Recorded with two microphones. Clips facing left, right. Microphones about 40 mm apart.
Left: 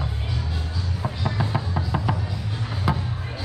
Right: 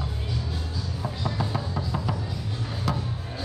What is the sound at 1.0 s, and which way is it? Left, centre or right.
Music, left.